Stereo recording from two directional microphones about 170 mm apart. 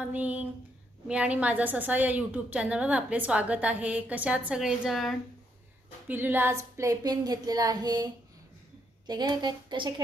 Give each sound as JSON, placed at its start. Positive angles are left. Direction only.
{"t": 0.1, "sound": "a woman's voice", "side_deg": -10}
{"t": 6.0, "sound": "speech", "side_deg": -10}